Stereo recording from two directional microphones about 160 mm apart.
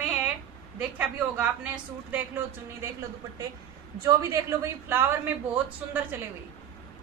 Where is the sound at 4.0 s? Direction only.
20° right (ahead or behind).